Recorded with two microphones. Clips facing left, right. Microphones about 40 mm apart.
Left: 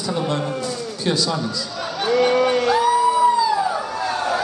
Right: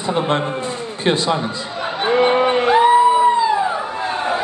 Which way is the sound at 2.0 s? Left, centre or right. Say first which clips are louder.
Right 2 dB; right.